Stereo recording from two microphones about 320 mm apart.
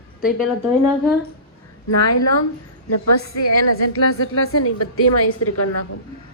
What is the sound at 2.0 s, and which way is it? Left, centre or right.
A woman's voice, left.